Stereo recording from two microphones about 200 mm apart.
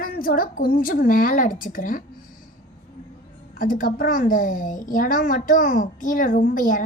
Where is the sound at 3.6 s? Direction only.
45° left (ahead or behind).